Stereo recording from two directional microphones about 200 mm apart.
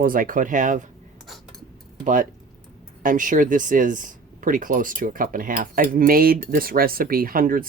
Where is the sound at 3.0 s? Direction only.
40° right (ahead or behind).